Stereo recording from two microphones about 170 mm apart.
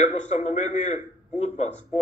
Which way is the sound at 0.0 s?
40° left (ahead or behind).